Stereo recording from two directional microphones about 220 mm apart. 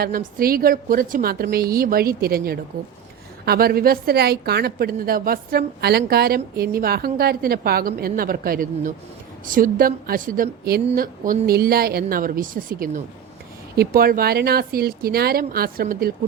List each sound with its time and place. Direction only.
0.0 s a woman's voice: 40° right (ahead or behind)